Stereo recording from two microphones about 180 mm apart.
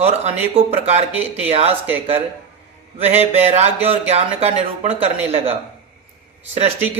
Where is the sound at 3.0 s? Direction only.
35° right (ahead or behind).